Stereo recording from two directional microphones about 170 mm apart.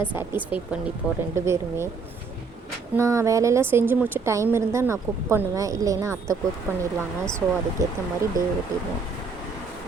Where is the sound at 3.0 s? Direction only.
15° right (ahead or behind).